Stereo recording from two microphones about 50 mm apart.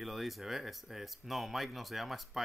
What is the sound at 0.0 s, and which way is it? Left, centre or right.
Speech, centre.